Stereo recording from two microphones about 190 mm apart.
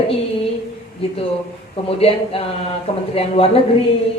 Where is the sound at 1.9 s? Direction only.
30° left (ahead or behind).